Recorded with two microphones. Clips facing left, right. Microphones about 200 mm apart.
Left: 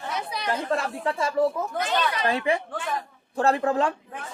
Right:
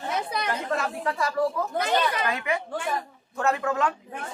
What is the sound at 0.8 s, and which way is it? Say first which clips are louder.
A man's voice: left 1 dB; 25° left (ahead or behind).